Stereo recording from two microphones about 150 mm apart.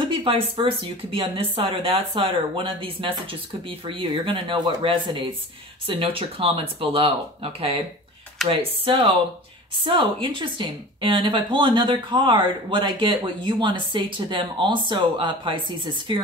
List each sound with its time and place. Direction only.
0.0 s a woman's voice: 35° right (ahead or behind)
8.5 s a woman's voice: 35° right (ahead or behind)